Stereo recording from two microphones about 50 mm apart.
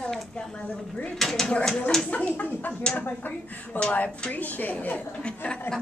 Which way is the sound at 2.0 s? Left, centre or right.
Left.